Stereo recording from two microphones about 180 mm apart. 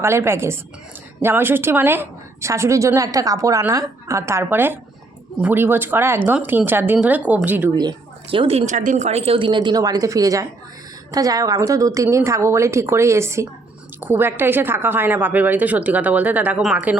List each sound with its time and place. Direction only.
0.0 s a woman's voice: 15° right (ahead or behind)
7.8 s a woman's voice: 25° right (ahead or behind); by 17.0 s 5° right (ahead or behind)